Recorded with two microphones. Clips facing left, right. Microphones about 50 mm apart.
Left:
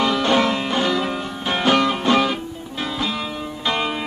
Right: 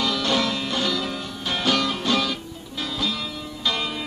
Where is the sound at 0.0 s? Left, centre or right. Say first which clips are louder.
Left 5 dB; left.